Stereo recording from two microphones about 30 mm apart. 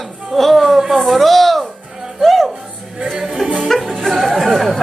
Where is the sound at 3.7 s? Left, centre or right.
Centre.